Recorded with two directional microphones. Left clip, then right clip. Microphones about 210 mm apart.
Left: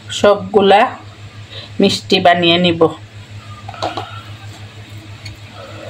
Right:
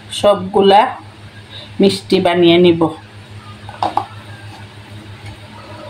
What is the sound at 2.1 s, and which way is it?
Speech, 25° left (ahead or behind).